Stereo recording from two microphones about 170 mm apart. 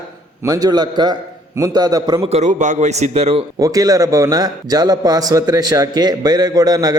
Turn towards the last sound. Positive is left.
turn(degrees=-25)  # may be behind; listen again after turning